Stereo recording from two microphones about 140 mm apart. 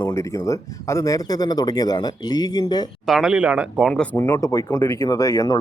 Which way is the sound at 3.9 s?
10° left (ahead or behind).